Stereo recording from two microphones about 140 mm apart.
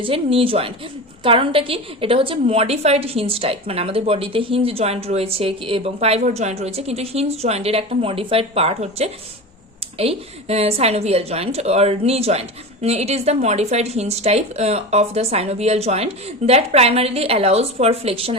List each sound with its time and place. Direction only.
0.0 s a woman's voice: 40° right (ahead or behind)